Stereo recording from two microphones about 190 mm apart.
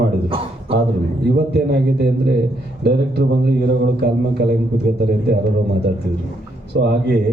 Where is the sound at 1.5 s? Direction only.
60° right (ahead or behind).